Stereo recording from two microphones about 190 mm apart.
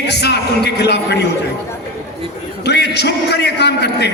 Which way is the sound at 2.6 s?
60° left (ahead or behind).